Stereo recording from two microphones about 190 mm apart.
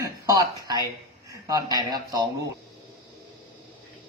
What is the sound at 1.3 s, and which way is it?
Speech, 20° right (ahead or behind).